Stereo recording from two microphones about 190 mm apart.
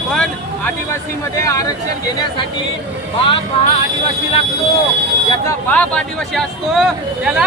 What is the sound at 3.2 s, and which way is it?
Speech, 25° left (ahead or behind).